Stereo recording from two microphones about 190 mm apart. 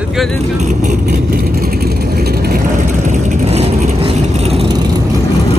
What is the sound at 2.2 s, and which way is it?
Vehicle, 55° right (ahead or behind).